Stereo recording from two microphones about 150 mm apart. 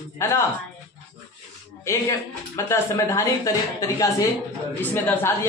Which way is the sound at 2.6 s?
20° left (ahead or behind).